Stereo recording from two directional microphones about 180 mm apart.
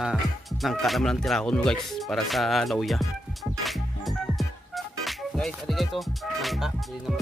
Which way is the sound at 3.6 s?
Centre (ahead or behind).